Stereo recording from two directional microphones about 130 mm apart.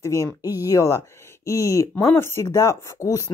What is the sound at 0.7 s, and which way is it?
Speech, 25° left (ahead or behind).